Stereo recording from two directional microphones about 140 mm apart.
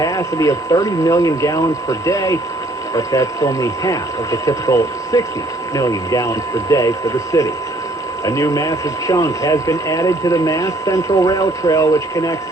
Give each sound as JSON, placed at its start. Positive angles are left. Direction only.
{"t": 0.0, "sound": "speech", "side_deg": 25}